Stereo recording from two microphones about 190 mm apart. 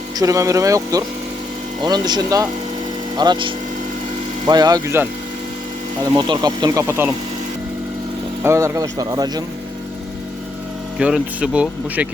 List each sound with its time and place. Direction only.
0.2 s speech: 15° right (ahead or behind)
6.1 s speech: 20° right (ahead or behind)
8.4 s speech: 15° right (ahead or behind)
10.9 s speech: 5° right (ahead or behind)